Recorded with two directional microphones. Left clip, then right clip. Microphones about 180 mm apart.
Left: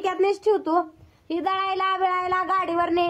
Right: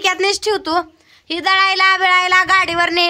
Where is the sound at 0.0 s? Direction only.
10° right (ahead or behind).